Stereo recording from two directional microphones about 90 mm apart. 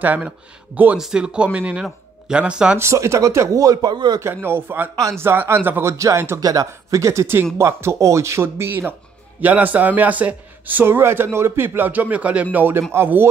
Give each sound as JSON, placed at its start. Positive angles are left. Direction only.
{"t": 0.0, "sound": "a man's voice", "side_deg": -20}
{"t": 2.8, "sound": "speech", "side_deg": -30}
{"t": 4.2, "sound": "a man's voice", "side_deg": -25}